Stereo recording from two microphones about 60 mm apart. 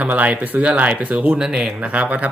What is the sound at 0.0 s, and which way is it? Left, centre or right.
Speech, right.